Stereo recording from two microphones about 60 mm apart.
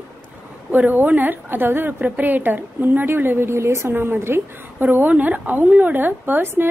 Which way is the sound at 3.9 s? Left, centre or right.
Right.